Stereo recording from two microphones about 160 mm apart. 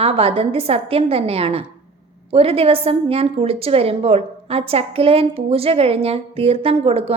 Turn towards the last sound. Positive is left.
turn(degrees=-40)  # may be behind; listen again after turning